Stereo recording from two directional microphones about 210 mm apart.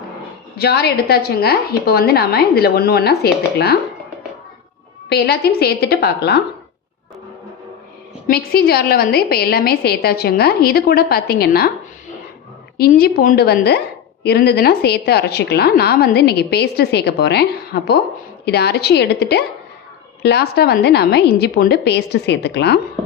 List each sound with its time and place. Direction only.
0.5 s a woman's voice: 50° left (ahead or behind)
5.0 s a woman's voice: 50° left (ahead or behind)
8.3 s a woman's voice: 45° left (ahead or behind)
12.7 s a woman's voice: 45° left (ahead or behind)